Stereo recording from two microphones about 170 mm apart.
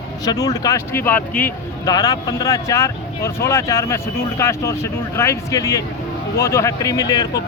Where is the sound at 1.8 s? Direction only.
20° left (ahead or behind).